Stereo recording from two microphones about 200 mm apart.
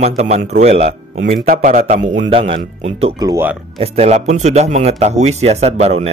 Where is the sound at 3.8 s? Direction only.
30° right (ahead or behind).